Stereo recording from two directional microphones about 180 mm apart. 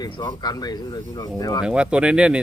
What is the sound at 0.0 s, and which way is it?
Speech, 20° left (ahead or behind).